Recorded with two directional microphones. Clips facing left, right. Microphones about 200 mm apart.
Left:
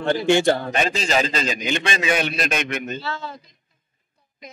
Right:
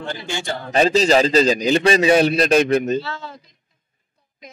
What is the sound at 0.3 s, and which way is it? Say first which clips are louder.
Speech: left 12 dB; 60° left (ahead or behind).